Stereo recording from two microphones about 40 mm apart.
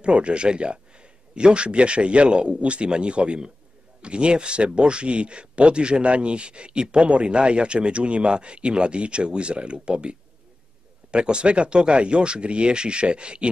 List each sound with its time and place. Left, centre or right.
0.0 s speech: right